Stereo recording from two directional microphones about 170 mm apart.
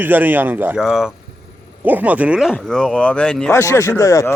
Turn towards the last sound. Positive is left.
turn(degrees=15)  # may be behind; listen again after turning